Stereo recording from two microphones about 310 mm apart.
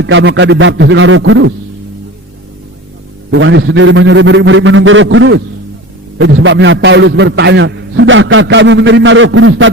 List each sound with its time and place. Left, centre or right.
0.0 s a man's voice: right
3.3 s a man's voice: right